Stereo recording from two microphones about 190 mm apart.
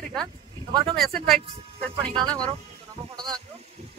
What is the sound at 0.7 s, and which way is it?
Speech, 20° right (ahead or behind).